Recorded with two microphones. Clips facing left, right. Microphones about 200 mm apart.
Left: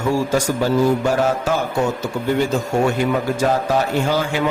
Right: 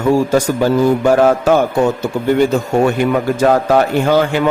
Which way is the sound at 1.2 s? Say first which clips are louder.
Right 8 dB; 60° right (ahead or behind).